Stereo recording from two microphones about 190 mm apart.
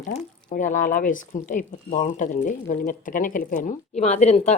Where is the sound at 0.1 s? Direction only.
40° left (ahead or behind).